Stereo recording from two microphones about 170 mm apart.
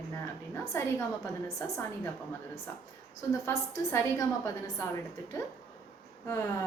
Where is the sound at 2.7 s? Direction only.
15° left (ahead or behind).